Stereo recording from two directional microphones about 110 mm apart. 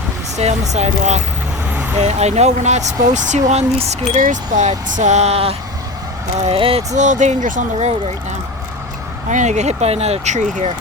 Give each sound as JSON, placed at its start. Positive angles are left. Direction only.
{"t": 0.7, "sound": "speech", "side_deg": -90}
{"t": 6.3, "sound": "speech", "side_deg": -90}
{"t": 6.6, "sound": "speech", "side_deg": -60}
{"t": 9.4, "sound": "speech", "side_deg": -90}